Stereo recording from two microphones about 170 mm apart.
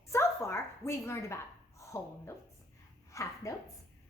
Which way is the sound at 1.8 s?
15° left (ahead or behind).